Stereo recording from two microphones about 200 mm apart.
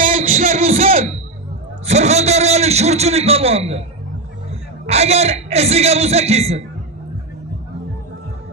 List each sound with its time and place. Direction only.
0.0 s a sound: 40° right (ahead or behind)
1.9 s a man's voice: 35° right (ahead or behind)
4.9 s a man's voice: 30° right (ahead or behind)